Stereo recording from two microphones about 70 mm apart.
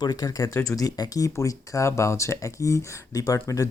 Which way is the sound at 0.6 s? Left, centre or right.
Left.